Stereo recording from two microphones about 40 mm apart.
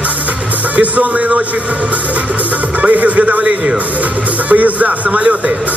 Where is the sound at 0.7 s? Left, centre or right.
Right.